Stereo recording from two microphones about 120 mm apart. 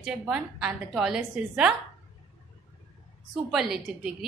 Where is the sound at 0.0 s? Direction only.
5° right (ahead or behind).